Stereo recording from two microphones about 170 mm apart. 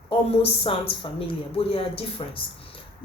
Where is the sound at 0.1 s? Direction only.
35° left (ahead or behind).